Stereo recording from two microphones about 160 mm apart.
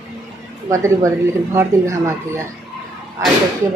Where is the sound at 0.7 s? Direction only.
20° right (ahead or behind).